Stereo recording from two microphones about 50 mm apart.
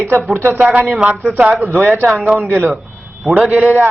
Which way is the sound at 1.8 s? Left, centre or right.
Right.